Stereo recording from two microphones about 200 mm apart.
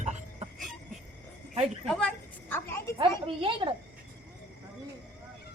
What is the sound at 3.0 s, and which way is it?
Speech, 25° right (ahead or behind).